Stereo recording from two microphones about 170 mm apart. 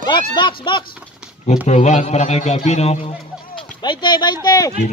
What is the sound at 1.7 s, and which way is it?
A man's voice, 45° left (ahead or behind).